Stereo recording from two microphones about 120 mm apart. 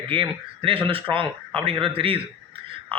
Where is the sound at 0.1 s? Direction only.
45° right (ahead or behind).